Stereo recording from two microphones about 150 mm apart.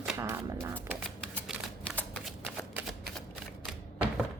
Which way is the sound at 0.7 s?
10° left (ahead or behind).